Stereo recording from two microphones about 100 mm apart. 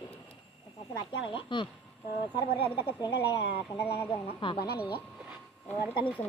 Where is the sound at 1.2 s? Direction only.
55° left (ahead or behind).